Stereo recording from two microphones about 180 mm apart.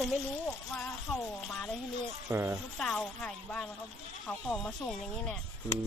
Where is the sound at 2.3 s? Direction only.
15° right (ahead or behind).